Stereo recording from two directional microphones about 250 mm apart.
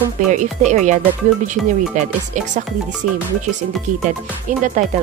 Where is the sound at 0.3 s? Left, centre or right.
Right.